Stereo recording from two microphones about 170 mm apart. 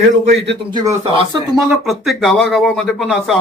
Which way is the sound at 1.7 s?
Centre (ahead or behind).